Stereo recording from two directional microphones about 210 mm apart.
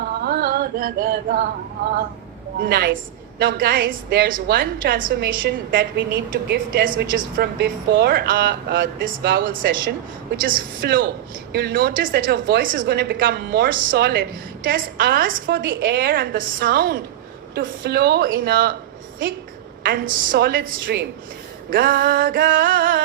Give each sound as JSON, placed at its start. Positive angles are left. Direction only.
{"t": 0.0, "sound": "music", "side_deg": -50}
{"t": 2.6, "sound": "a woman's voice", "side_deg": -50}
{"t": 19.8, "sound": "a woman's voice", "side_deg": -45}